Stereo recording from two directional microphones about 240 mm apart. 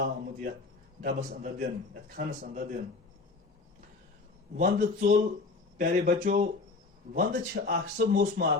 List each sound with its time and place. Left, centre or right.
0.0 s a man's voice: right
4.5 s a man's voice: right